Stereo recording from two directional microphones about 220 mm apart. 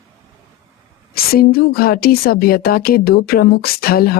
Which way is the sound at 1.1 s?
45° left (ahead or behind).